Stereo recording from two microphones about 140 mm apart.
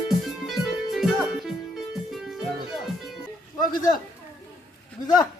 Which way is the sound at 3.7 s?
30° left (ahead or behind).